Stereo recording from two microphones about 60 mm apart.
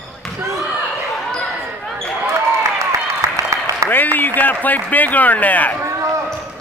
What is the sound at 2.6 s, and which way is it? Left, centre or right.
Applause, right.